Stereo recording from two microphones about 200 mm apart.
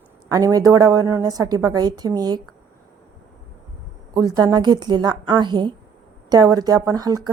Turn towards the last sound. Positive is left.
turn(degrees=-20)  # may be behind; listen again after turning